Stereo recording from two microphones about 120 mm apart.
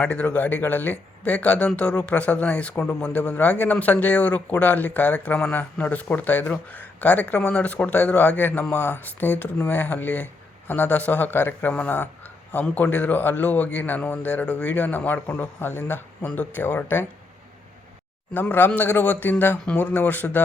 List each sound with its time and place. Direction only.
0.0 s speech: 10° left (ahead or behind)
18.3 s speech: 15° left (ahead or behind)